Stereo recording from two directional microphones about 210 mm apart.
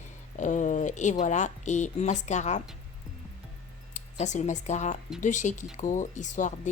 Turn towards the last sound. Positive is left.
turn(degrees=35)  # may be behind; listen again after turning